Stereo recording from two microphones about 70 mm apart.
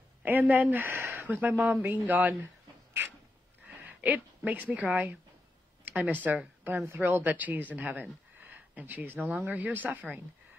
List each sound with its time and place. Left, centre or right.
0.2 s speech: right
3.6 s a sound: right
6.2 s a woman's voice: right